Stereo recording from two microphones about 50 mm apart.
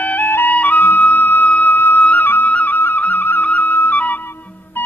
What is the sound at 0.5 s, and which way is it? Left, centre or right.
Music, left.